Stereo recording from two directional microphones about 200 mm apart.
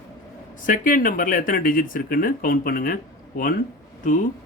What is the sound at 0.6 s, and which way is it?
Speech, 40° left (ahead or behind).